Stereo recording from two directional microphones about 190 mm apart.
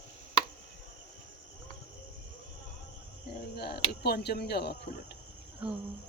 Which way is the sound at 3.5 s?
55° left (ahead or behind).